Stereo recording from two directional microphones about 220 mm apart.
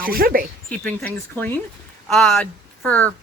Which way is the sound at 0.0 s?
40° right (ahead or behind).